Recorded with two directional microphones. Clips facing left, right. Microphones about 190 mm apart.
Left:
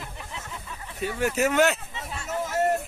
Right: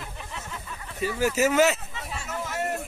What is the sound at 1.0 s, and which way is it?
Speech, centre (ahead or behind).